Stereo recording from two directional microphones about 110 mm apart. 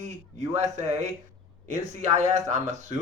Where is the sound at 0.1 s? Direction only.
90° right.